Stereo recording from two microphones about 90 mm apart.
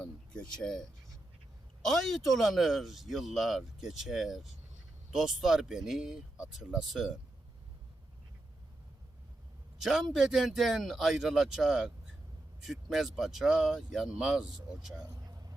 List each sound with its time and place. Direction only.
0.0 s speech: 5° left (ahead or behind)
9.8 s speech: 5° right (ahead or behind)
15.0 s vehicle: 35° right (ahead or behind)